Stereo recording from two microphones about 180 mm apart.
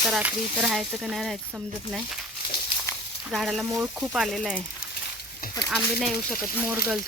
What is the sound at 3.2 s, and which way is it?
Speech, centre (ahead or behind).